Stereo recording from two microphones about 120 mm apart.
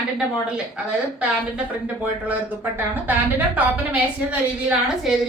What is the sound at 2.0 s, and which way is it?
Speech, 15° right (ahead or behind).